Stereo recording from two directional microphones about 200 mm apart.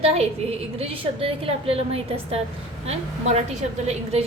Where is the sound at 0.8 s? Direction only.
30° right (ahead or behind).